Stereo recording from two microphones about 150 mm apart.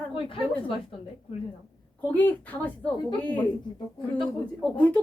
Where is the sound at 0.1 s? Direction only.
35° left (ahead or behind).